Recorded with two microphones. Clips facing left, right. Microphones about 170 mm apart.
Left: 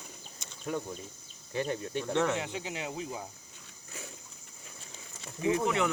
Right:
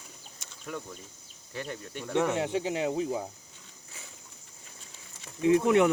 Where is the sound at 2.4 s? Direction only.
35° right (ahead or behind).